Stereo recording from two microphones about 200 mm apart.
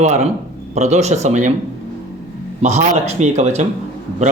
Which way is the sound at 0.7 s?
35° right (ahead or behind).